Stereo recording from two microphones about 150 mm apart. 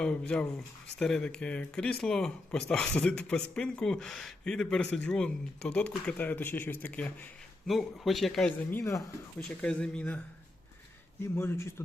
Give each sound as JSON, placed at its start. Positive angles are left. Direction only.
{"t": 0.0, "sound": "speech", "side_deg": 5}
{"t": 8.7, "sound": "speech", "side_deg": 20}
{"t": 9.6, "sound": "speech", "side_deg": 5}
{"t": 11.2, "sound": "speech", "side_deg": 15}